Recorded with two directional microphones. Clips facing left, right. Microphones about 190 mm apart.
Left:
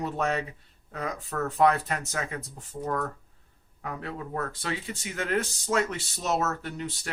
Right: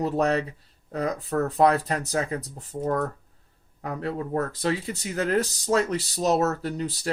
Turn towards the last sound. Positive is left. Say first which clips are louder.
# right 5 dB
turn(degrees=-35)  # may be behind; listen again after turning